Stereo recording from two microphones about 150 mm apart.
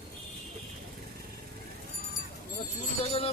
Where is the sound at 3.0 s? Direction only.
40° left (ahead or behind).